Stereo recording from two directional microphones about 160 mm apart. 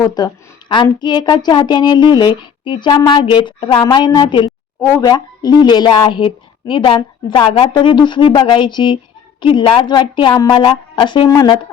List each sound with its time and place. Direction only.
0.0 s a woman's voice: 25° left (ahead or behind)
11.3 s speech: 20° left (ahead or behind)